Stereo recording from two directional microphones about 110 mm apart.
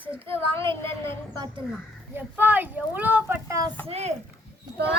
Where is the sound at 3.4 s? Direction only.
30° right (ahead or behind).